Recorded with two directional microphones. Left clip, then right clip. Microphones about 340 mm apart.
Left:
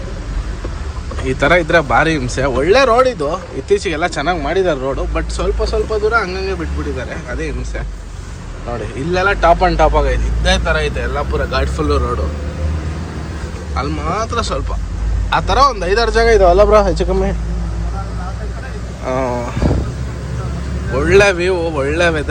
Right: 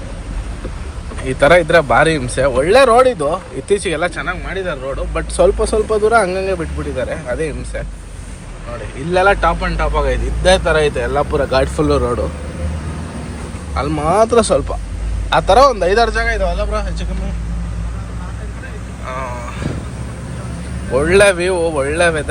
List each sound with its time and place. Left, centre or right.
1.2 s speech: centre
9.1 s speech: centre
9.6 s speech: centre
13.7 s speech: centre; by 17.1 s left
19.0 s speech: centre
20.9 s speech: centre